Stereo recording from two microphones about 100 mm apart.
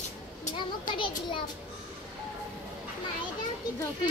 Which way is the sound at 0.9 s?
55° left (ahead or behind).